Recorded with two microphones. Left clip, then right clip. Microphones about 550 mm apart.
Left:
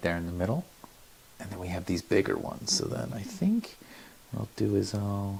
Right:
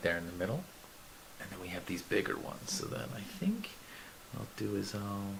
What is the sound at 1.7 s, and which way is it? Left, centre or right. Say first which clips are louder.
Speech: left 7 dB; left.